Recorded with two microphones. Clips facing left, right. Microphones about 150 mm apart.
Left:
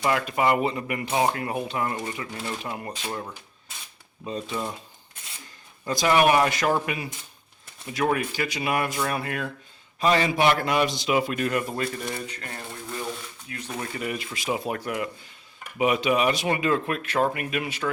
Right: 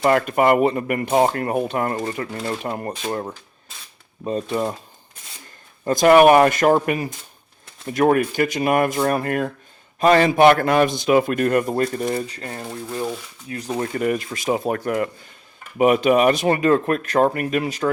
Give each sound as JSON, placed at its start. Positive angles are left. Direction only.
{"t": 0.0, "sound": "speech", "side_deg": -50}
{"t": 5.8, "sound": "speech", "side_deg": -50}